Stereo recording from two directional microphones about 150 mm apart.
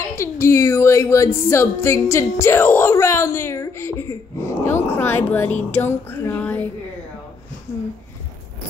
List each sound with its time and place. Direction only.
0.1 s a woman's voice: 20° left (ahead or behind)